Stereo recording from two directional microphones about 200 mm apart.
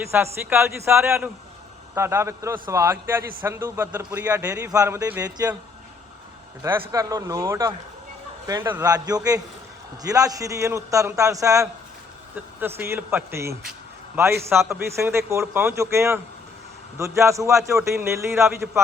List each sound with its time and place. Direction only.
0.1 s a man's voice: 10° right (ahead or behind)
6.6 s a man's voice: 15° right (ahead or behind)